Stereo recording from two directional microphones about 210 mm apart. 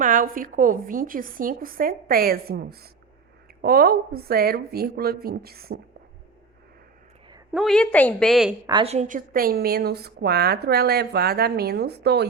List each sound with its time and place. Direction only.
0.0 s a woman's voice: 40° right (ahead or behind)
7.5 s a woman's voice: centre (ahead or behind)
8.6 s a woman's voice: 25° right (ahead or behind); by 12.3 s 50° right (ahead or behind)